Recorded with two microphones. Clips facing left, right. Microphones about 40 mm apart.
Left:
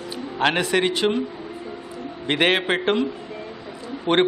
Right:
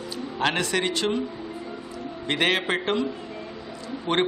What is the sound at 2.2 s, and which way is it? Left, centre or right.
Speech, left.